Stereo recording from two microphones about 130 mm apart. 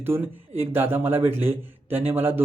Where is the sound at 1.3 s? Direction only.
50° right (ahead or behind).